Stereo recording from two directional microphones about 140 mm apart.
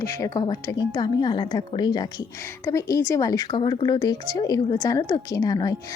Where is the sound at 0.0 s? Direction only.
20° left (ahead or behind).